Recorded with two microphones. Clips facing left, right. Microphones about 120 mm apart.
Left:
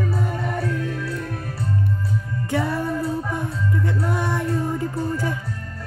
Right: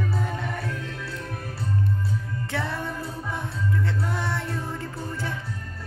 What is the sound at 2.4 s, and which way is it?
Music, 10° left (ahead or behind).